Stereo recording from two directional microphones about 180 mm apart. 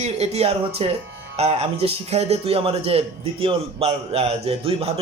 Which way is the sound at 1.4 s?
35° right (ahead or behind).